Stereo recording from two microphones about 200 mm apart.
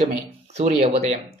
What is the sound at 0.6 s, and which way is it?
Speech, 35° right (ahead or behind).